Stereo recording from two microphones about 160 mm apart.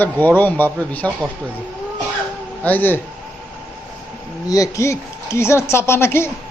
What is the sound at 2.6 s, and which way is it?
Speech, 10° left (ahead or behind).